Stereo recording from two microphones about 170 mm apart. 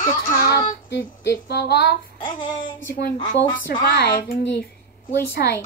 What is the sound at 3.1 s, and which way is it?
Speech, 30° left (ahead or behind).